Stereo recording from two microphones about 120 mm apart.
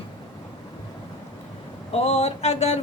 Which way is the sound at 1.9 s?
65° left (ahead or behind).